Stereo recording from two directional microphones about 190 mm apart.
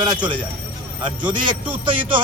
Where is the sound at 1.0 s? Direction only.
25° right (ahead or behind).